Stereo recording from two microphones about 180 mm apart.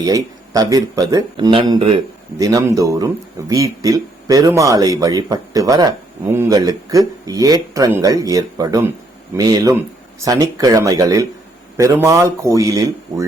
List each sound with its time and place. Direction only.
0.0 s speech: 20° right (ahead or behind)